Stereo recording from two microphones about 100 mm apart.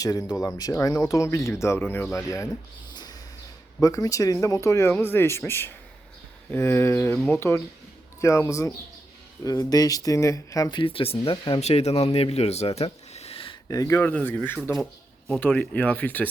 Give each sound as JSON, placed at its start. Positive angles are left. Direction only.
{"t": 0.0, "sound": "speech", "side_deg": 40}
{"t": 2.9, "sound": "a sound", "side_deg": 45}
{"t": 3.8, "sound": "speech", "side_deg": 35}
{"t": 10.8, "sound": "speech", "side_deg": 65}
{"t": 13.7, "sound": "speech", "side_deg": 35}
{"t": 14.0, "sound": "speech", "side_deg": 20}